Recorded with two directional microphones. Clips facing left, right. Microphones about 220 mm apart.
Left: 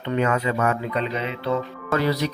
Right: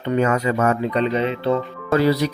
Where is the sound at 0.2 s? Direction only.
40° right (ahead or behind).